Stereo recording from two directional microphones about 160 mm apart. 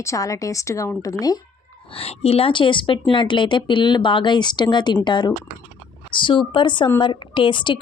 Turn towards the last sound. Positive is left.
turn(degrees=30)  # may be behind; listen again after turning